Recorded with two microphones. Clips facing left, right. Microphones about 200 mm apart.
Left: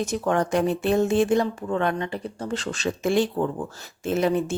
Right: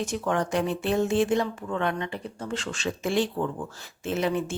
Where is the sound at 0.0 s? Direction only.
40° left (ahead or behind).